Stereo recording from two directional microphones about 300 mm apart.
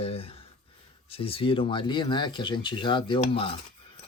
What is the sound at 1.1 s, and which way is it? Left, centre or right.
Speech, centre.